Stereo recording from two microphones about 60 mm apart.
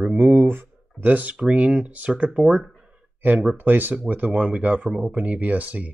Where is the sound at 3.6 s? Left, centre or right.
Right.